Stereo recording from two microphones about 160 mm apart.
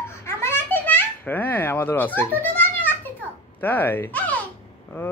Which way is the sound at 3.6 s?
10° left (ahead or behind).